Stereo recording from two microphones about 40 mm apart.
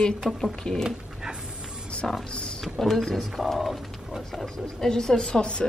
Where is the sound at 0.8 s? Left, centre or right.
Centre.